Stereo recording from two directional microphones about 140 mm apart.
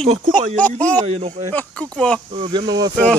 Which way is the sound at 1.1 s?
45° right (ahead or behind).